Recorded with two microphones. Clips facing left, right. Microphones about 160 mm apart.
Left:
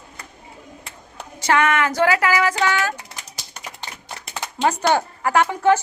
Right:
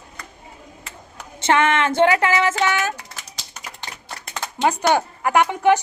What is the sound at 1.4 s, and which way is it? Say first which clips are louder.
A child's voice: right 1 dB; 25° right (ahead or behind).